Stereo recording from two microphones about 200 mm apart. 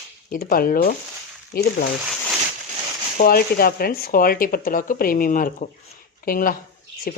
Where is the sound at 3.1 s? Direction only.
45° left (ahead or behind).